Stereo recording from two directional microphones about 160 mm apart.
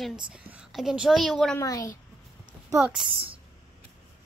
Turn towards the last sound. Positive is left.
turn(degrees=-5)  # may be behind; listen again after turning